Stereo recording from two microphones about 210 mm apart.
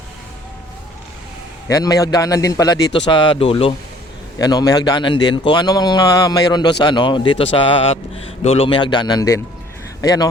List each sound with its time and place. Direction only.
1.6 s a man's voice: 15° left (ahead or behind)